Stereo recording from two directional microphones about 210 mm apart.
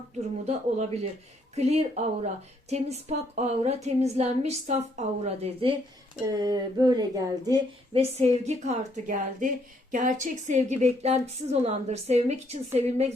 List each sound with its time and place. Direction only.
0.4 s a woman's voice: 30° right (ahead or behind)
6.2 s a woman's voice: 15° right (ahead or behind)
8.1 s a woman's voice: 30° right (ahead or behind)